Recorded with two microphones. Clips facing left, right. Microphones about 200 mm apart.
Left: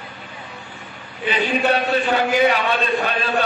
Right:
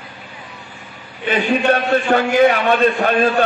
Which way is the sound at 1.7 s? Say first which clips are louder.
Right 4 dB; 50° right (ahead or behind).